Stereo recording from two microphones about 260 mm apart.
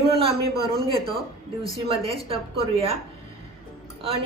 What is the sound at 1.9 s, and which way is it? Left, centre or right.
A woman's voice, right.